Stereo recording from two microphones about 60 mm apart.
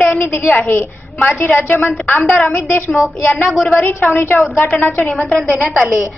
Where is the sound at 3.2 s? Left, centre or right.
Left.